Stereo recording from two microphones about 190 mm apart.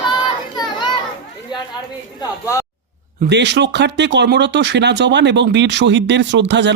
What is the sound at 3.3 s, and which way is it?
Speech, 65° right (ahead or behind).